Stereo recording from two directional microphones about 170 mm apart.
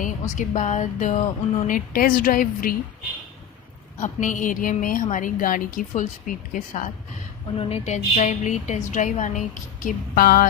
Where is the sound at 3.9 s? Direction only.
45° left (ahead or behind).